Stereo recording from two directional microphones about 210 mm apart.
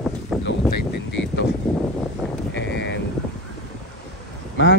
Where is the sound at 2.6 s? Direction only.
60° left (ahead or behind).